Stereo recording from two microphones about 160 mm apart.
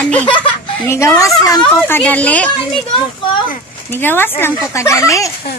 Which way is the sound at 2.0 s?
10° left (ahead or behind).